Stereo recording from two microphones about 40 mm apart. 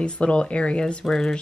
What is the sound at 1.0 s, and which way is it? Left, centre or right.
Speech, centre.